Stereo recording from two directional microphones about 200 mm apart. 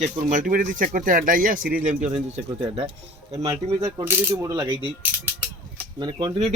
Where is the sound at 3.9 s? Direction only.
10° right (ahead or behind).